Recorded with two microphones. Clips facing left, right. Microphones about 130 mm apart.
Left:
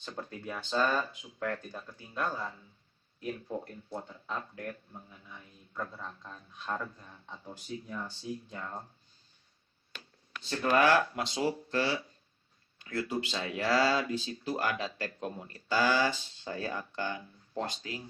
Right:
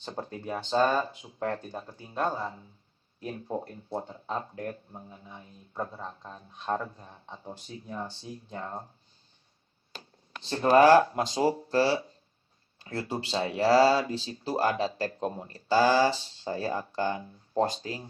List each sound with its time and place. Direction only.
0.0 s speech: 35° right (ahead or behind)
9.9 s speech: 35° right (ahead or behind)